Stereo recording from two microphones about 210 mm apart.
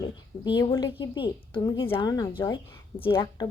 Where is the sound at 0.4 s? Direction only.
20° left (ahead or behind).